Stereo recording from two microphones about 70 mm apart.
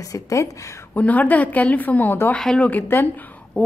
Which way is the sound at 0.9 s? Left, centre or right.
Left.